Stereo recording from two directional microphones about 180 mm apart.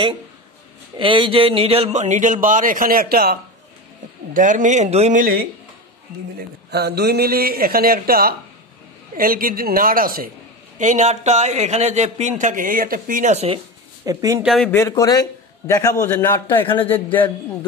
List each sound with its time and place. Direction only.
0.9 s a man's voice: 25° right (ahead or behind); by 3.3 s 55° right (ahead or behind)
4.3 s a man's voice: 45° right (ahead or behind)
5.2 s a man's voice: 55° right (ahead or behind)
10.8 s a man's voice: 40° right (ahead or behind)
14.0 s a man's voice: 20° right (ahead or behind)
14.4 s speech: centre (ahead or behind)
14.7 s a man's voice: 15° left (ahead or behind)